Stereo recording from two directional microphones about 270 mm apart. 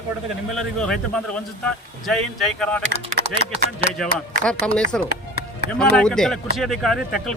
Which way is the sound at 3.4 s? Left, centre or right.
Left.